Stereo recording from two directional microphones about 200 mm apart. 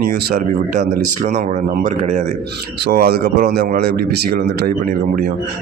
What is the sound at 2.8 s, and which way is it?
Speech, 50° right (ahead or behind).